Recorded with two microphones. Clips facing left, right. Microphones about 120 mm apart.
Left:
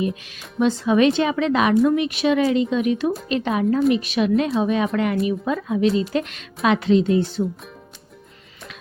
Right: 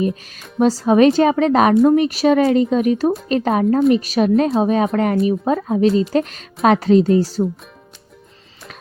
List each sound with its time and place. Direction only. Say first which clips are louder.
0.0 s a woman's voice: right 4 dB; 40° right (ahead or behind)